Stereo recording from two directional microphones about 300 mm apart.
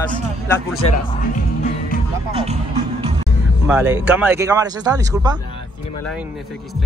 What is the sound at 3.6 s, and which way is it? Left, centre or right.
Speech, centre.